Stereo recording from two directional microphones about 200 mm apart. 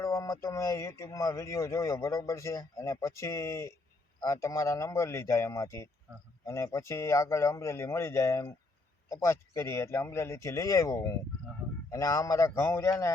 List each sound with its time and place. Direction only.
0.0 s speech: 15° left (ahead or behind)